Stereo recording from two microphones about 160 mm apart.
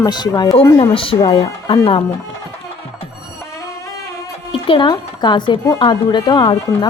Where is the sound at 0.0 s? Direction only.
25° left (ahead or behind).